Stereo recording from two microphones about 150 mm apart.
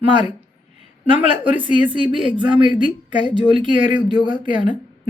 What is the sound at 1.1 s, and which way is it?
Speech, 55° left (ahead or behind).